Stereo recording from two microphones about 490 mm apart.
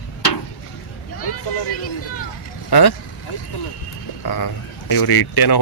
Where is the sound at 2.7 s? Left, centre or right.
Left.